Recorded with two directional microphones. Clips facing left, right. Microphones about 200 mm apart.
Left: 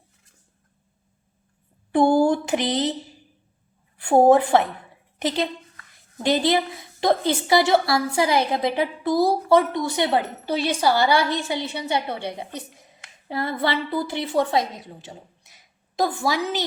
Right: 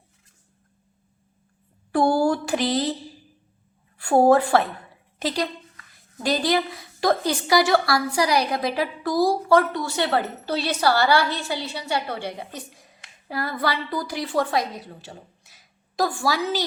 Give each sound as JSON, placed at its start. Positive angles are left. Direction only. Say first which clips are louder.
{"t": 1.9, "sound": "a sound", "louder": "left 2 dB", "side_deg": 20}
{"t": 3.9, "sound": "a woman's voice", "louder": "left 1 dB", "side_deg": 20}
{"t": 6.2, "sound": "a woman's voice", "louder": "left 2 dB", "side_deg": 20}